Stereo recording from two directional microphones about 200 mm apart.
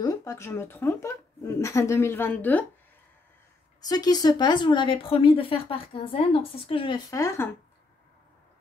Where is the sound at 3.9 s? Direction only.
20° left (ahead or behind).